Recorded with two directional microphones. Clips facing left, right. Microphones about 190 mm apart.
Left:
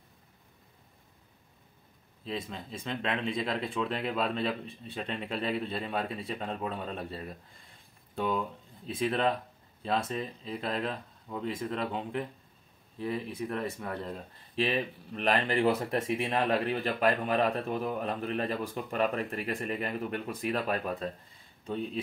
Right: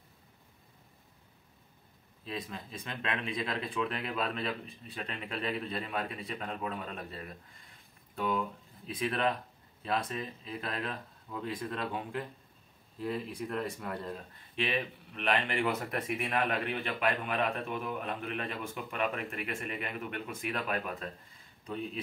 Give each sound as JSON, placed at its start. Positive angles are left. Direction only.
{"t": 2.2, "sound": "speech", "side_deg": 25}
{"t": 13.0, "sound": "speech", "side_deg": 0}
{"t": 14.1, "sound": "speech", "side_deg": 35}